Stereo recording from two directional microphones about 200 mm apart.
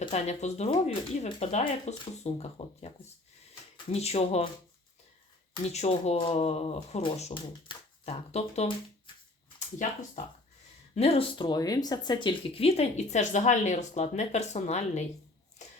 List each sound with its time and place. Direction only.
0.0 s speech: 30° left (ahead or behind)
3.9 s speech: 30° left (ahead or behind)
5.7 s speech: 35° left (ahead or behind)
10.2 s speech: 40° left (ahead or behind)